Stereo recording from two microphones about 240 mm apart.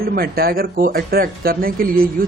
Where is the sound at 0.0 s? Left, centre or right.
Right.